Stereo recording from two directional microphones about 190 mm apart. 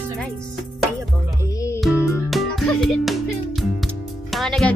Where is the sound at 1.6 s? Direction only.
15° left (ahead or behind).